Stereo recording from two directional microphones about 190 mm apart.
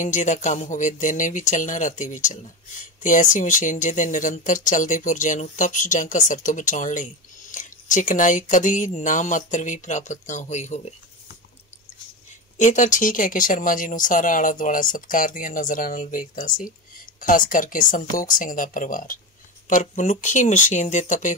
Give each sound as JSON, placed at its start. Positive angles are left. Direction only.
{"t": 0.0, "sound": "speech", "side_deg": 40}
{"t": 12.5, "sound": "speech", "side_deg": 40}